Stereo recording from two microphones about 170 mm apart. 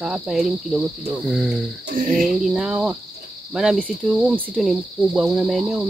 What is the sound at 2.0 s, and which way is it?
Speech, 50° right (ahead or behind).